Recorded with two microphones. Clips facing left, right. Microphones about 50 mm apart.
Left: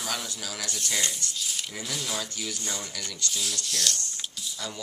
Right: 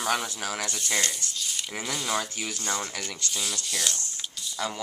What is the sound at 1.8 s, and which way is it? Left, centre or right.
Speech, centre.